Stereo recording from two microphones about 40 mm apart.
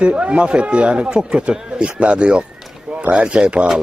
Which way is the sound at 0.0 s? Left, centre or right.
Right.